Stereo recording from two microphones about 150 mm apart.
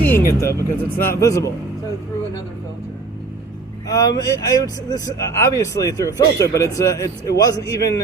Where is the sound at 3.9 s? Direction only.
25° left (ahead or behind).